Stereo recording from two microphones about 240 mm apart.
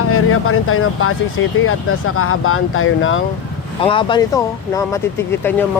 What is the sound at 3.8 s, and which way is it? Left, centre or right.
Speech, left.